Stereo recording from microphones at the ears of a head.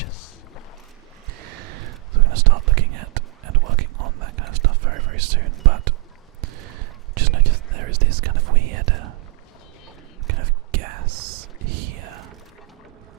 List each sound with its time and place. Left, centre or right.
0.0 s rowboat: left
1.3 s whispering: right
10.2 s whispering: right